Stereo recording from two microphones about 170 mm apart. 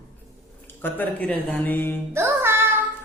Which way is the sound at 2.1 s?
15° right (ahead or behind).